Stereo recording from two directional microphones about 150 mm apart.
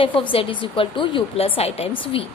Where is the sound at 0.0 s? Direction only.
35° left (ahead or behind).